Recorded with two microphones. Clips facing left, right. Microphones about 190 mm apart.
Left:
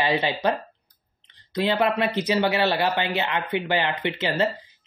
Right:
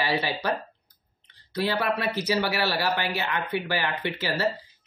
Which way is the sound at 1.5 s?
20° left (ahead or behind).